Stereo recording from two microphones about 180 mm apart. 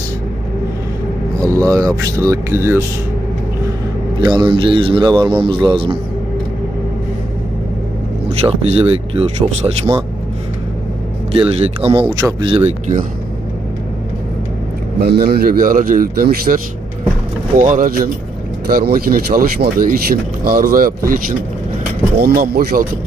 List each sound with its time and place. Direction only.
1.4 s speech: 15° right (ahead or behind)
4.2 s a man's voice: 20° right (ahead or behind)
8.3 s speech: 35° right (ahead or behind)
11.3 s speech: 30° right (ahead or behind)
15.0 s a man's voice: 60° right (ahead or behind)
17.6 s speech: 50° right (ahead or behind)
22.2 s a man's voice: 55° right (ahead or behind)